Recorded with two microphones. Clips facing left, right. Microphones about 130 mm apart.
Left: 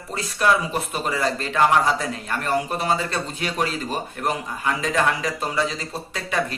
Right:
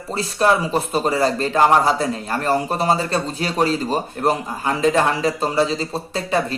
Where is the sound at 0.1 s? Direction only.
30° right (ahead or behind).